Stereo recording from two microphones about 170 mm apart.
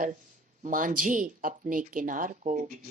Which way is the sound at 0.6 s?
50° right (ahead or behind).